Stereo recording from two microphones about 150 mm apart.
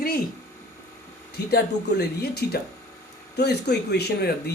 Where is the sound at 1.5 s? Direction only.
90° left.